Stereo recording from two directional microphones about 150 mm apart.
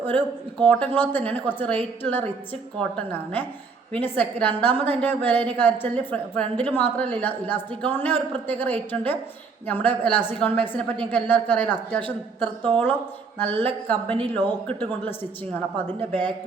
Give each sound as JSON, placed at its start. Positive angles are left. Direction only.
{"t": 0.6, "sound": "a woman's voice", "side_deg": 10}